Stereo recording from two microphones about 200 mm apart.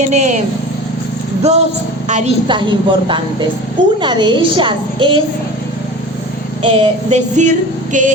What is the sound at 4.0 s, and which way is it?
A woman's voice, 25° right (ahead or behind).